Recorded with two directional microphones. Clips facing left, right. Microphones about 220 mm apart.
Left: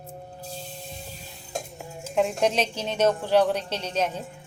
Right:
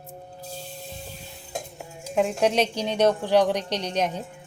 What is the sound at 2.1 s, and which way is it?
A woman's voice, 10° right (ahead or behind).